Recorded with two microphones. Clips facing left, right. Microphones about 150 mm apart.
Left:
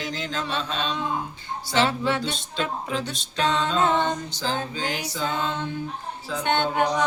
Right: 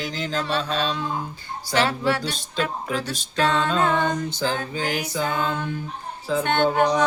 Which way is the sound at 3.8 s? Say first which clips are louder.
Left 2 dB; 25° left (ahead or behind).